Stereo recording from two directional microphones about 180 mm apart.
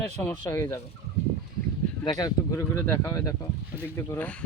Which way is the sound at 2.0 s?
20° left (ahead or behind).